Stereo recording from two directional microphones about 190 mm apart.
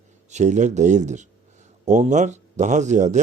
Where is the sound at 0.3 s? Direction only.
40° right (ahead or behind).